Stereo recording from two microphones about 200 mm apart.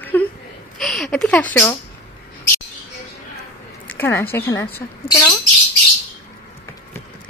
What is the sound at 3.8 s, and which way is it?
Speech, 10° left (ahead or behind).